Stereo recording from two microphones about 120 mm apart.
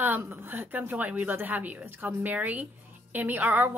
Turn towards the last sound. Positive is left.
turn(degrees=-15)  # may be behind; listen again after turning